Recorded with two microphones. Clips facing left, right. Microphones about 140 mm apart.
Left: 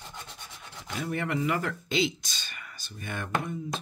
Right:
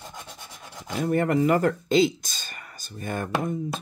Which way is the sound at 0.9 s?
45° right (ahead or behind).